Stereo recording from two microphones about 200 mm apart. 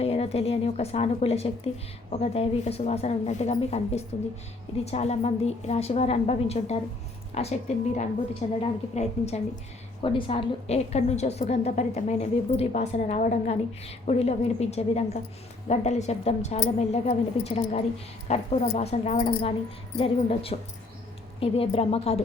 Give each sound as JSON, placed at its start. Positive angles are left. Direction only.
{"t": 0.0, "sound": "a woman's voice", "side_deg": 30}